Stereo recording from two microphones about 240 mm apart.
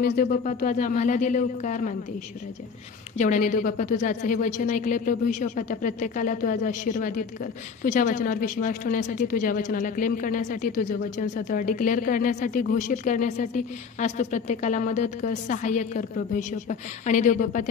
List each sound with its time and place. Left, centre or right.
0.0 s a woman's voice: left
3.2 s a woman's voice: left